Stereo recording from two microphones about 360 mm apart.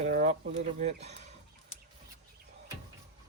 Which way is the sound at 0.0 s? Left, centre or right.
Right.